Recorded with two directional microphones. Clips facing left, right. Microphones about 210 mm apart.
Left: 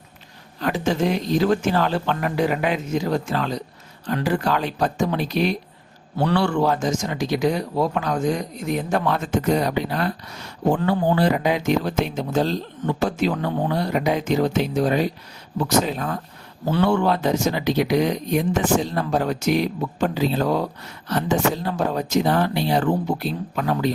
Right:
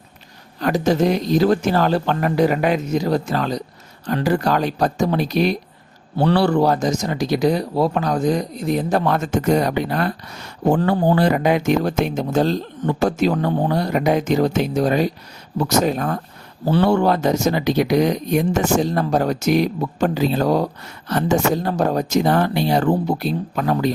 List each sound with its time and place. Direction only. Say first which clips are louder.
0.6 s speech: right 4 dB; 40° right (ahead or behind)